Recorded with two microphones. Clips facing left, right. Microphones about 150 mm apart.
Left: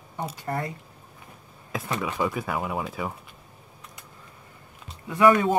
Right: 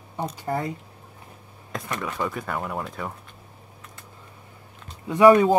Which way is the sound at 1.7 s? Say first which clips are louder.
Left 1 dB; 5° left (ahead or behind).